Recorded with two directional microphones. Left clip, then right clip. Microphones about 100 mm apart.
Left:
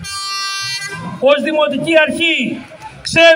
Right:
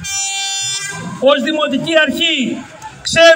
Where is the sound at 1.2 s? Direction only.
45° left (ahead or behind).